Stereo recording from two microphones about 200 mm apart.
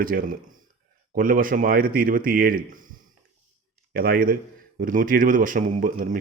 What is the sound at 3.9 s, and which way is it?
A man's voice, 45° right (ahead or behind).